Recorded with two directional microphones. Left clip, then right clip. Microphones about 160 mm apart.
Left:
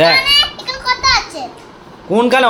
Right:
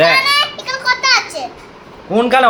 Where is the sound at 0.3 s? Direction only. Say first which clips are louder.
Left 2 dB; 15° right (ahead or behind).